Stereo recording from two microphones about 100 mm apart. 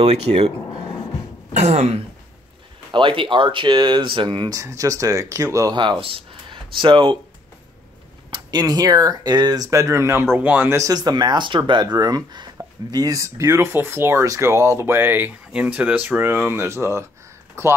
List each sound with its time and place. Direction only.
0.0 s speech: 90° right
1.7 s speech: 90° right
2.9 s speech: 55° right (ahead or behind); by 5.8 s 35° right (ahead or behind)
5.8 s speech: 55° right (ahead or behind)
8.3 s speech: 45° right (ahead or behind); by 10.8 s 20° right (ahead or behind)
10.8 s speech: 40° right (ahead or behind)